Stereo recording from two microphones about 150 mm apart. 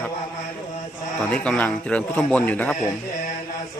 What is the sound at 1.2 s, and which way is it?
A man's voice, 10° left (ahead or behind).